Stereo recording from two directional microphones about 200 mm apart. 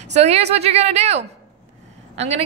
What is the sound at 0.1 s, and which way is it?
A woman's voice, 35° right (ahead or behind).